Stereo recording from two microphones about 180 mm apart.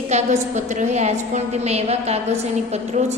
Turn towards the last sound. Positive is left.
turn(degrees=-40)  # may be behind; listen again after turning